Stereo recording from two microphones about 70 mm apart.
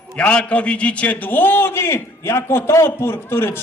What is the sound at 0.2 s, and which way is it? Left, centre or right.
A man's voice, centre.